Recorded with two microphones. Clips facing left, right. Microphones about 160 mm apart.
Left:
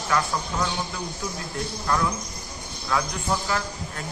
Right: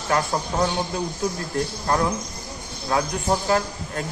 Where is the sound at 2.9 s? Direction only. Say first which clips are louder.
Right 4 dB; 40° right (ahead or behind).